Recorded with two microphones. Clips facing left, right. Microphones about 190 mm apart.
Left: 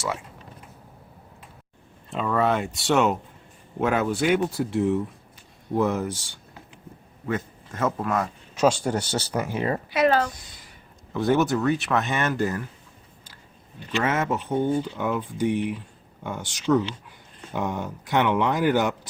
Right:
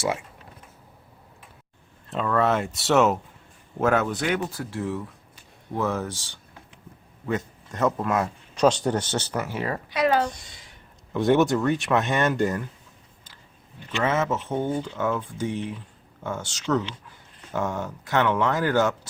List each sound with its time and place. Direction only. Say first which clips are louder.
2.0 s speech: even; centre (ahead or behind)
4.3 s speech: left 5 dB; 20° left (ahead or behind)
10.3 s speech: even; centre (ahead or behind)
13.9 s speech: even; 10° left (ahead or behind)